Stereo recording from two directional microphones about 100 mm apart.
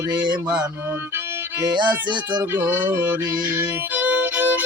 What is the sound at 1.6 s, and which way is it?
Music, 50° right (ahead or behind).